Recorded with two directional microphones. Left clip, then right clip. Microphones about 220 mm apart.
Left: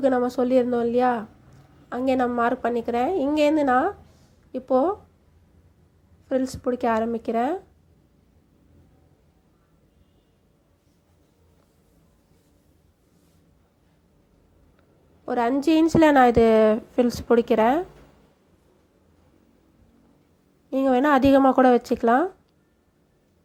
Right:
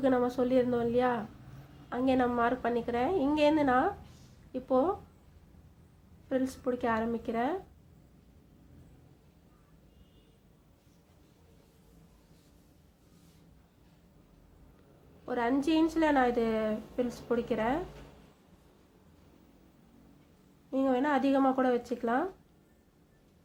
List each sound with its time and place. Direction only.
0.0 s a woman's voice: 25° left (ahead or behind)
6.2 s a woman's voice: 25° left (ahead or behind)
15.3 s a woman's voice: 30° left (ahead or behind)
20.7 s a woman's voice: 35° left (ahead or behind)